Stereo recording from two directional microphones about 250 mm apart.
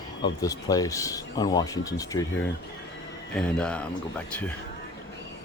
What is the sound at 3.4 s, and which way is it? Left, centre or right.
Speech, centre.